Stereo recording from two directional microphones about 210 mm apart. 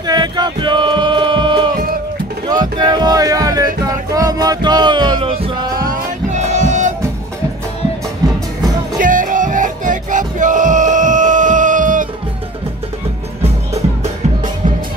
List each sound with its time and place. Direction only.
0.0 s music: 20° right (ahead or behind); by 6.9 s 35° right (ahead or behind)
8.2 s music: 15° right (ahead or behind)
9.0 s music: 40° right (ahead or behind)
13.4 s music: 30° right (ahead or behind)